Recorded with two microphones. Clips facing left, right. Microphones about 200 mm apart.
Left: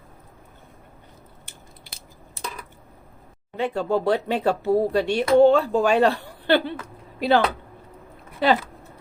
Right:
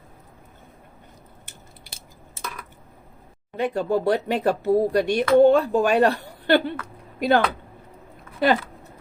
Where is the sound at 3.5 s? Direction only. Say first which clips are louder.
Right 1 dB; 15° right (ahead or behind).